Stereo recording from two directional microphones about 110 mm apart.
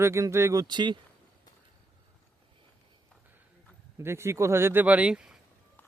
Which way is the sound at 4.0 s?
25° right (ahead or behind).